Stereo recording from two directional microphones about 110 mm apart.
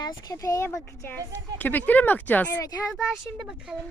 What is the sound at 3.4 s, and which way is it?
Speech, 10° right (ahead or behind).